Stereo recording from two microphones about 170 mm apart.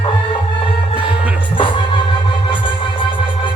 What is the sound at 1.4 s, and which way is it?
Music, 30° left (ahead or behind).